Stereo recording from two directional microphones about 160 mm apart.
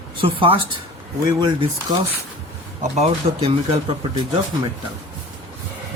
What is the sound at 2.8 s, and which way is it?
Speech, 45° right (ahead or behind).